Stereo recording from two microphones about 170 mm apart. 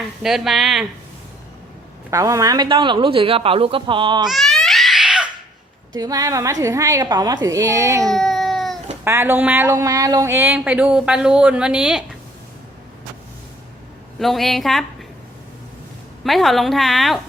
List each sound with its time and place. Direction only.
0.2 s a woman's voice: centre (ahead or behind)
2.0 s speech: 20° right (ahead or behind)
4.3 s crying: centre (ahead or behind)
6.0 s speech: 20° right (ahead or behind)
8.0 s a sound: centre (ahead or behind)
9.0 s speech: 15° right (ahead or behind)
14.2 s a woman's voice: centre (ahead or behind)
16.2 s a woman's voice: centre (ahead or behind)